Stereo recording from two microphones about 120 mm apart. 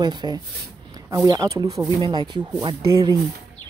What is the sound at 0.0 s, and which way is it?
Speech, 35° right (ahead or behind).